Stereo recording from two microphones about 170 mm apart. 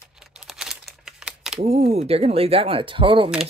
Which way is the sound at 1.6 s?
40° right (ahead or behind).